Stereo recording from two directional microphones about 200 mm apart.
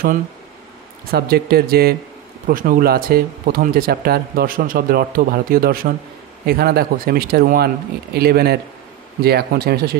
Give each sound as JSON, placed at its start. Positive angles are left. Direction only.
{"t": 1.1, "sound": "speech", "side_deg": -50}